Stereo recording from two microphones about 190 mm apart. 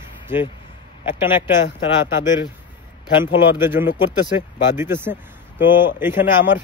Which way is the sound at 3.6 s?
10° right (ahead or behind).